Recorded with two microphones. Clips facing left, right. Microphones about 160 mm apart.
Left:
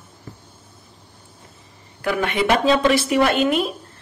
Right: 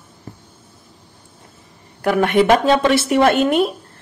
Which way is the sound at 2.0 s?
50° right (ahead or behind).